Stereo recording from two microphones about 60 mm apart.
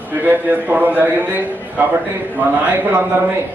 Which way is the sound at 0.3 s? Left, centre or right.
Right.